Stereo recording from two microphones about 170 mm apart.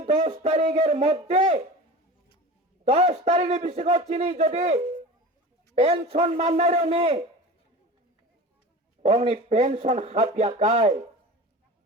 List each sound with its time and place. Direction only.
0.0 s a man's voice: 40° right (ahead or behind)
2.8 s a man's voice: 40° right (ahead or behind)
9.0 s a man's voice: 40° right (ahead or behind)